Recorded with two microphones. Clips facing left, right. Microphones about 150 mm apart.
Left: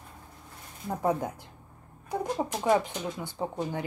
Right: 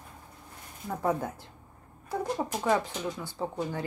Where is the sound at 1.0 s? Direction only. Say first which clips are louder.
Left 1 dB; 20° left (ahead or behind).